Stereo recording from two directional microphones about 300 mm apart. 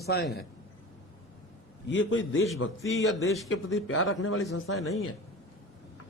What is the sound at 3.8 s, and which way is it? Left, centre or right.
A man's voice, left.